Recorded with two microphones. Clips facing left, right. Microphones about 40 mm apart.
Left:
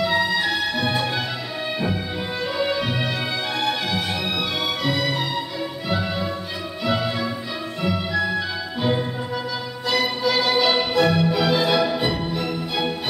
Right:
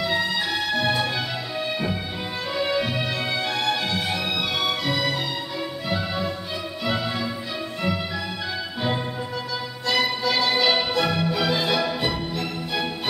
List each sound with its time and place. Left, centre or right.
0.0 s music: centre
2.5 s music: centre
9.8 s music: centre